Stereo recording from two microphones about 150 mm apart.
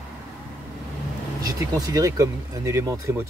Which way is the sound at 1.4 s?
25° right (ahead or behind).